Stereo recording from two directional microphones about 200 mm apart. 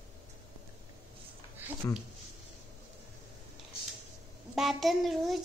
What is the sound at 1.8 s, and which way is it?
Speech, 15° left (ahead or behind).